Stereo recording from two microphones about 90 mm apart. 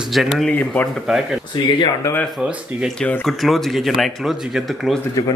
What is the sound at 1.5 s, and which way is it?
Speech, 60° left (ahead or behind).